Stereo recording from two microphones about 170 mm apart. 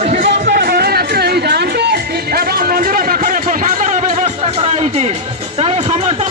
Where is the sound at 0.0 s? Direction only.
40° right (ahead or behind).